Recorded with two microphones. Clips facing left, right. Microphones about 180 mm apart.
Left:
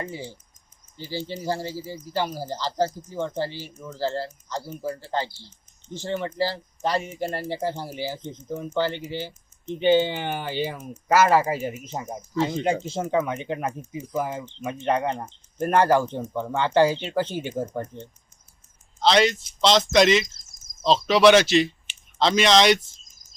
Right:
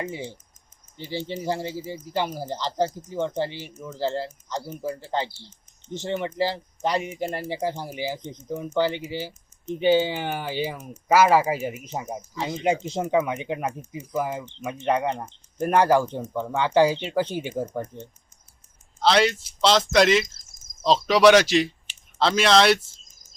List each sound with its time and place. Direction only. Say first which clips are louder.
0.0 s speech: right 2 dB; 20° right (ahead or behind); by 22.8 s 5° right (ahead or behind)